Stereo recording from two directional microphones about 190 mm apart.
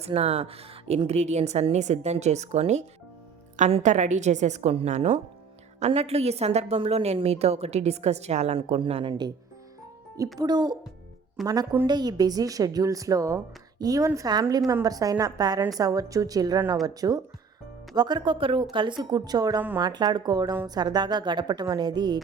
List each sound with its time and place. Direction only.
0.0 s a woman's voice: 35° right (ahead or behind)
10.3 s a woman's voice: 20° right (ahead or behind)